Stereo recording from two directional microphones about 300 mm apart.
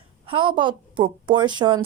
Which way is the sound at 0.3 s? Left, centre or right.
Centre.